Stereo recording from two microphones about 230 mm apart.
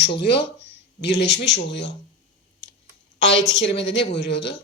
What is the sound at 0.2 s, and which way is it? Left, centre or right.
Speech, left.